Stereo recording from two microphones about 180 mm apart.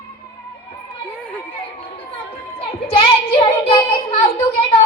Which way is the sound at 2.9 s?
30° left (ahead or behind).